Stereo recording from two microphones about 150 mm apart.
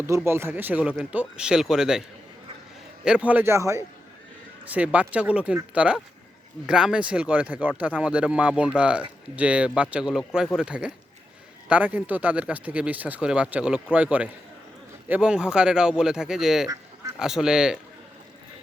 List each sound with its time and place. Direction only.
0.3 s speech: 15° right (ahead or behind)
16.6 s duck: 25° right (ahead or behind)
17.2 s speech: 5° right (ahead or behind)